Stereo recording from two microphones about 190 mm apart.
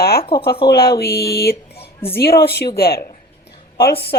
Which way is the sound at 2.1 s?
60° left (ahead or behind).